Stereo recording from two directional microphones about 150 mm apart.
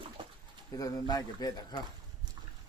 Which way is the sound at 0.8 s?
25° left (ahead or behind).